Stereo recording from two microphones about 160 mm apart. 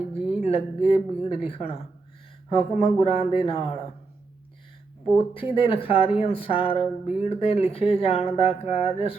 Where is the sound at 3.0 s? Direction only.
35° left (ahead or behind).